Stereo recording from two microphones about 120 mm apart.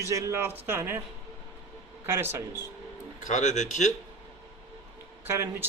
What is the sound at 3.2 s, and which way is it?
Speech, 85° left.